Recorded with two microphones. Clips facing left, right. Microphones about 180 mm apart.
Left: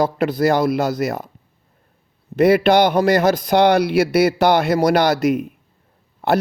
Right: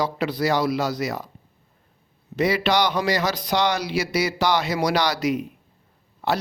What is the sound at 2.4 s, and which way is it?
Speech, 55° left (ahead or behind).